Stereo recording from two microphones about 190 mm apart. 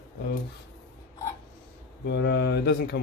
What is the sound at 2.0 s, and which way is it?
Speech, 60° left (ahead or behind).